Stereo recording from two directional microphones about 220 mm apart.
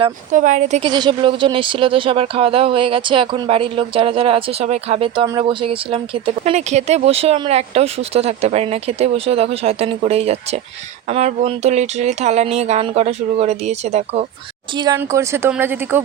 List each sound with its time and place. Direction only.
0.0 s speech: 35° right (ahead or behind)
0.8 s speech: 20° right (ahead or behind)
14.8 s speech: 15° right (ahead or behind)